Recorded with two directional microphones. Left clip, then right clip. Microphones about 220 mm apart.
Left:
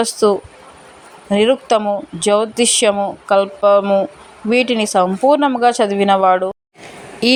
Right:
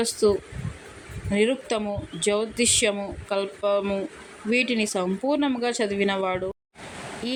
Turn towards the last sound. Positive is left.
turn(degrees=45)  # may be behind; listen again after turning